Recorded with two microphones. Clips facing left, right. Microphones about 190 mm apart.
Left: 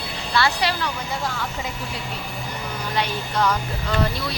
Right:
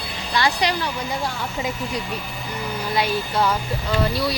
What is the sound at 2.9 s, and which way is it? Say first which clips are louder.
Speech: right 3 dB; 10° right (ahead or behind).